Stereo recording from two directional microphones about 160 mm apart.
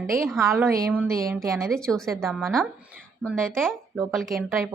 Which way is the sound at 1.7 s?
5° left (ahead or behind).